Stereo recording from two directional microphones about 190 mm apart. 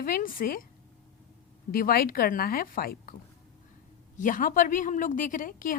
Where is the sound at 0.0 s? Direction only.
50° left (ahead or behind).